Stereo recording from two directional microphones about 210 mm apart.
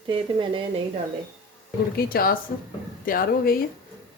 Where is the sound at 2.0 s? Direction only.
45° left (ahead or behind).